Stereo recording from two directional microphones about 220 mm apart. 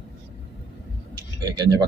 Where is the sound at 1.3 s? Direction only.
15° right (ahead or behind).